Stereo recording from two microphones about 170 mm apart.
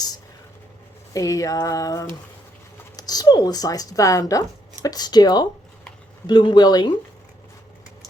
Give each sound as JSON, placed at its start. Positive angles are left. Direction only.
{"t": 1.1, "sound": "speech", "side_deg": 20}